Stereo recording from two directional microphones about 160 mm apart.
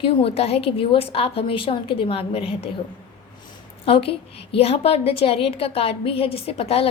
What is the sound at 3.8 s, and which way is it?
Speech, 35° left (ahead or behind).